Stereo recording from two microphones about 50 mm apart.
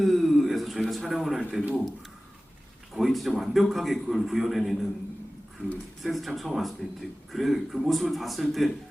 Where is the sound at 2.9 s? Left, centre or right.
Centre.